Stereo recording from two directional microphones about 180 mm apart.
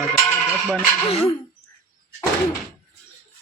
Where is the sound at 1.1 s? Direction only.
30° left (ahead or behind).